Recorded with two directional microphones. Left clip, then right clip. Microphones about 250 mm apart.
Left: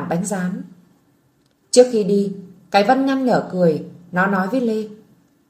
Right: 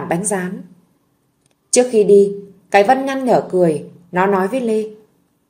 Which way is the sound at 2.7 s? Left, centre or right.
Right.